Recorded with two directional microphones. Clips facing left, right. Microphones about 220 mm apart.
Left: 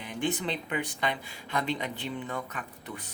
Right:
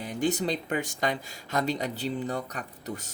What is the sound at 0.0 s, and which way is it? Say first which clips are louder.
Speech: right 4 dB; 40° right (ahead or behind).